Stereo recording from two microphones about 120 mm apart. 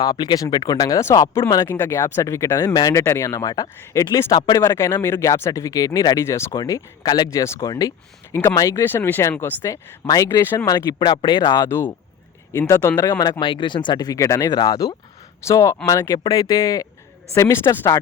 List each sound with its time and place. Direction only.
0.0 s speech: 35° left (ahead or behind)
4.7 s speech: 20° left (ahead or behind)
10.7 s speech: 35° left (ahead or behind)
11.6 s speech: 20° left (ahead or behind)